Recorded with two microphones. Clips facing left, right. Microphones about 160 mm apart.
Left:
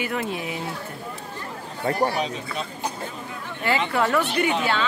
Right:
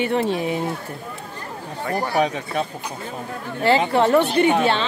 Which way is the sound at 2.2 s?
60° right (ahead or behind).